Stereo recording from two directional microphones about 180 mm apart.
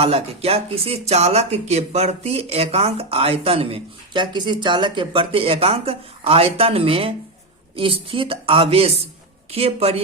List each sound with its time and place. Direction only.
0.0 s speech: 35° right (ahead or behind)